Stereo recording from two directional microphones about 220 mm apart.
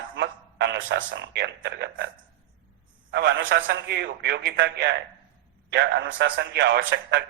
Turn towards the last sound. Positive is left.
turn(degrees=-50)  # may be behind; listen again after turning